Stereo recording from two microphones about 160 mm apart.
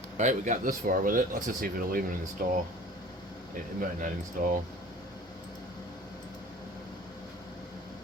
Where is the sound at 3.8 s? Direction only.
55° right (ahead or behind).